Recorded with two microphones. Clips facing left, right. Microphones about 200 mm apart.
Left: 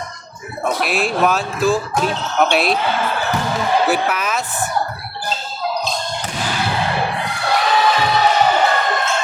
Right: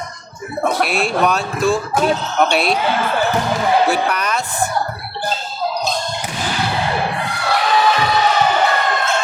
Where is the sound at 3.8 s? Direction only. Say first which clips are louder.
Even; 5° left (ahead or behind).